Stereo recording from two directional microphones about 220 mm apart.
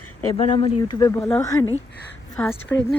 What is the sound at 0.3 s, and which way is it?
Speech, 20° left (ahead or behind).